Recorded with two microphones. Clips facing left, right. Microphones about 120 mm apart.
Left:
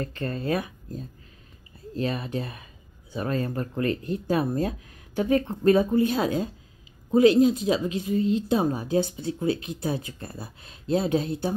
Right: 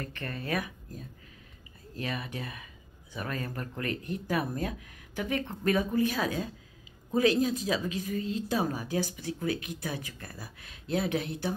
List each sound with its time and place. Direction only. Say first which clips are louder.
0.0 s speech: left 8 dB; 30° left (ahead or behind)